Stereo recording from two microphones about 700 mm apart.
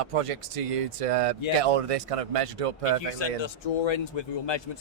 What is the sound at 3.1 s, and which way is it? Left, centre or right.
Speech, left.